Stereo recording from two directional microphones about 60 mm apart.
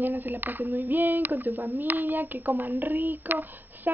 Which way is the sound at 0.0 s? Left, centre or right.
Right.